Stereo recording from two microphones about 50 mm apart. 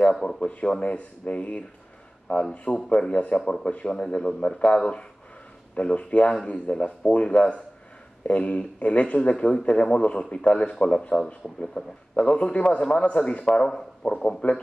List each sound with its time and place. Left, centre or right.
0.1 s a man's voice: centre
2.3 s speech: left
3.0 s a man's voice: left